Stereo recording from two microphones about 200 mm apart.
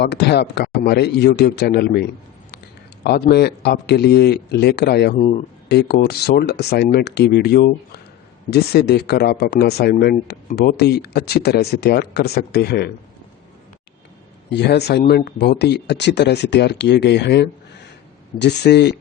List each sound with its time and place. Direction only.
0.0 s speech: 55° left (ahead or behind)
5.1 s speech: 35° left (ahead or behind)
5.6 s speech: 55° left (ahead or behind)
14.5 s speech: 55° left (ahead or behind)